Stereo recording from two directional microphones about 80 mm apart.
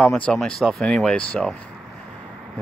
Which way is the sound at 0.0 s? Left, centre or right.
Centre.